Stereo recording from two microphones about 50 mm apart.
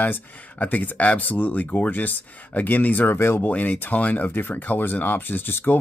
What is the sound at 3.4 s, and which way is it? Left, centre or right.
Speech, left.